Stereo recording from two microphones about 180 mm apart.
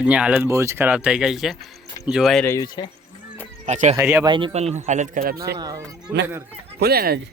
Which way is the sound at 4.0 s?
10° right (ahead or behind).